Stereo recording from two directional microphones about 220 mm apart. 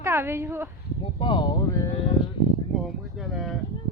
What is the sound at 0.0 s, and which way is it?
Speech, 10° right (ahead or behind).